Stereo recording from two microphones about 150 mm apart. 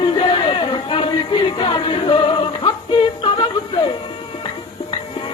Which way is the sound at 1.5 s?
35° left (ahead or behind).